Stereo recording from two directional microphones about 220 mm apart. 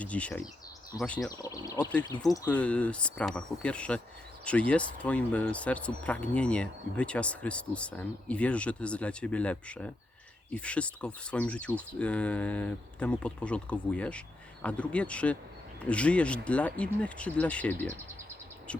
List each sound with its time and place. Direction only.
0.0 s speech: 5° left (ahead or behind)
1.3 s speech: 15° left (ahead or behind)